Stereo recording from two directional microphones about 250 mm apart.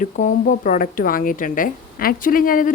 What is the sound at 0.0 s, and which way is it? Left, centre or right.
A woman's voice, left.